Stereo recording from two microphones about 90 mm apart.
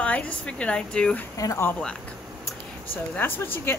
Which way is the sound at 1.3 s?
40° left (ahead or behind).